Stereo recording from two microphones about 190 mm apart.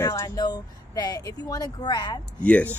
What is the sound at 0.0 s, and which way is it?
A woman's voice, 15° left (ahead or behind).